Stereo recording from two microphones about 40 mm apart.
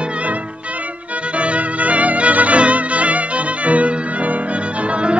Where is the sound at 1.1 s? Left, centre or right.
Right.